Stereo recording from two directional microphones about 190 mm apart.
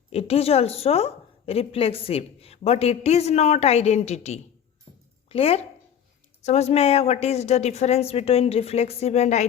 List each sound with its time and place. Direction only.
0.1 s a woman's voice: 30° left (ahead or behind)